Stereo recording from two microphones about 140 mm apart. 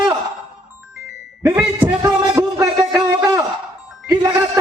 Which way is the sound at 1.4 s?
15° right (ahead or behind).